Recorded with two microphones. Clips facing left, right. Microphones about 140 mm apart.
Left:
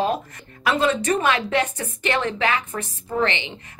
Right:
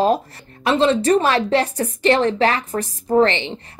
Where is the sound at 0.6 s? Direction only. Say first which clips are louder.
Right 5 dB; 25° right (ahead or behind).